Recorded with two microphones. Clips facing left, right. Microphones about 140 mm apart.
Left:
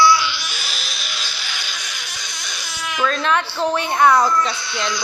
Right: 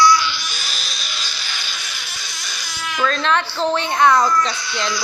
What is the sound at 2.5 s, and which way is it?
Baby cry, centre (ahead or behind).